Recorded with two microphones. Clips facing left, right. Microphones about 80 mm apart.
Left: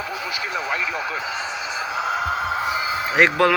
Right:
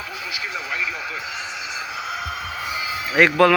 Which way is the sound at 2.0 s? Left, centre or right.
Left.